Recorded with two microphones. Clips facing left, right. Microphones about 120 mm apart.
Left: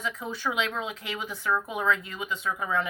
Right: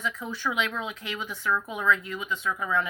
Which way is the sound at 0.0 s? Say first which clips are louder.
Even; 15° left (ahead or behind).